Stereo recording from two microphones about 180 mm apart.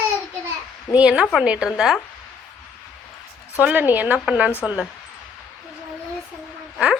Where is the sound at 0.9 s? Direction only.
5° right (ahead or behind).